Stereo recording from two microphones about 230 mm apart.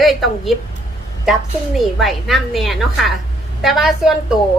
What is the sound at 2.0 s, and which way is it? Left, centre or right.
A woman's voice, centre.